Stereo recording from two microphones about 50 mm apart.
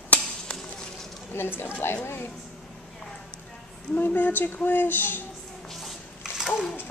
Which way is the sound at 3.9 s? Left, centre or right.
Left.